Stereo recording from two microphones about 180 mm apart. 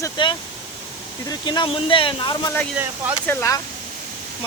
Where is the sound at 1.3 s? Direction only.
25° left (ahead or behind).